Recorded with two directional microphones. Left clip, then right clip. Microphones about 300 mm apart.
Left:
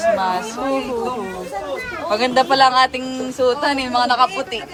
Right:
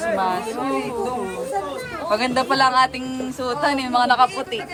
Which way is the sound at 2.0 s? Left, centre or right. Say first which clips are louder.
Left 4 dB; centre.